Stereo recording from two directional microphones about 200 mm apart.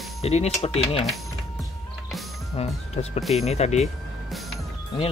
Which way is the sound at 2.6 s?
30° left (ahead or behind).